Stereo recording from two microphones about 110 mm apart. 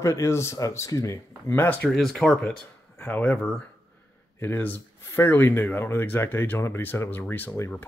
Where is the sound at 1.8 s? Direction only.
5° left (ahead or behind).